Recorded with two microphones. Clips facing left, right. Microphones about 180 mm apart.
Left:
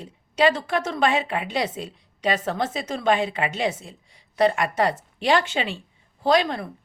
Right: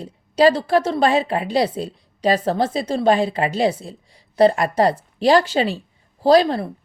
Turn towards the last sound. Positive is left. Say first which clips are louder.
# right 6 dB
turn(degrees=-35)  # may be behind; listen again after turning